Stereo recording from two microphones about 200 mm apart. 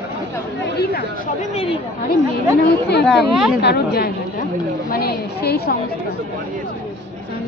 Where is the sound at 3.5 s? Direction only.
55° left (ahead or behind).